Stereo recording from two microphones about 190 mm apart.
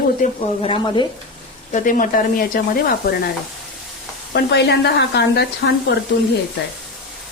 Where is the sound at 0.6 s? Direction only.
25° left (ahead or behind).